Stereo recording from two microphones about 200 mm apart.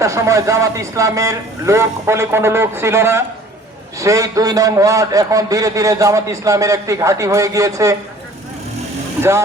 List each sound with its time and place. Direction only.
0.0 s a man's voice: 15° right (ahead or behind)